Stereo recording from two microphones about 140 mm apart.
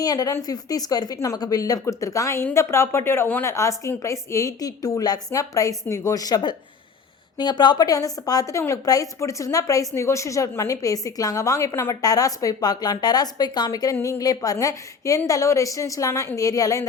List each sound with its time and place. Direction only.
0.0 s a woman's voice: 25° left (ahead or behind)